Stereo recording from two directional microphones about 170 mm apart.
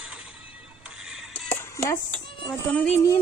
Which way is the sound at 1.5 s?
15° left (ahead or behind).